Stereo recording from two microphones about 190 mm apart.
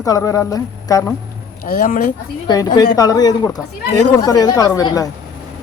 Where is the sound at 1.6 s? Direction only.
45° left (ahead or behind).